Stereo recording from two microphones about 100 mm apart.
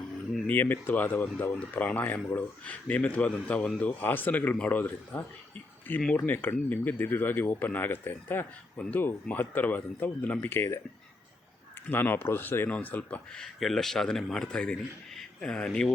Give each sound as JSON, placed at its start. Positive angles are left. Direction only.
{"t": 0.4, "sound": "speech", "side_deg": 20}
{"t": 11.9, "sound": "speech", "side_deg": 20}